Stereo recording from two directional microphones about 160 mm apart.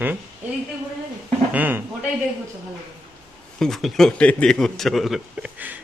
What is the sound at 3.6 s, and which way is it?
A man's voice, centre (ahead or behind).